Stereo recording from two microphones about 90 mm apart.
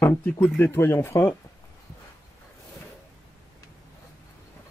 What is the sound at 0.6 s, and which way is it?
Speech, 25° left (ahead or behind).